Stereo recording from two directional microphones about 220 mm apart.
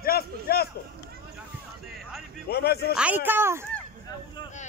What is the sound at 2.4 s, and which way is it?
Speech, 45° left (ahead or behind).